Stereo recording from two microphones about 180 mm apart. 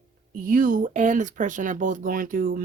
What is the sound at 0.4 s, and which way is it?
Speech, 50° right (ahead or behind).